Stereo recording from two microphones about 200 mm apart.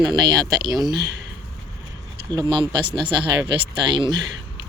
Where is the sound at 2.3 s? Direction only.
20° right (ahead or behind).